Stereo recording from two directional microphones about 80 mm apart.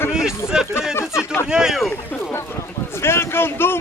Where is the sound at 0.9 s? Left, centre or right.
Left.